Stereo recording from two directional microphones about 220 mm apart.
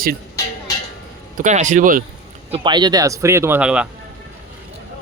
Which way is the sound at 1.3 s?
35° right (ahead or behind).